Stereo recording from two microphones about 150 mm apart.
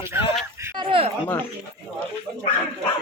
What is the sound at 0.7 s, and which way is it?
Speech, 35° right (ahead or behind).